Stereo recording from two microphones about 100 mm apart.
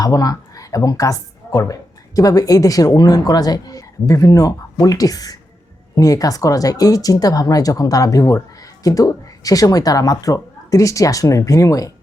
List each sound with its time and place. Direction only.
0.0 s speech: 40° left (ahead or behind)